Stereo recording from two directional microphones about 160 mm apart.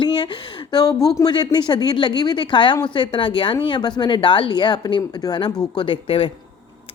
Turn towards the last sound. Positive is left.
turn(degrees=35)  # may be behind; listen again after turning